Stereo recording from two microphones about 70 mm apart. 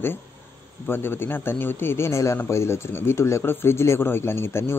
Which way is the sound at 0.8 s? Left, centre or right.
Left.